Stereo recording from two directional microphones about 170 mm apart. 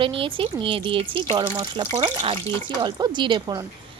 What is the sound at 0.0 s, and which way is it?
Speech, 30° right (ahead or behind).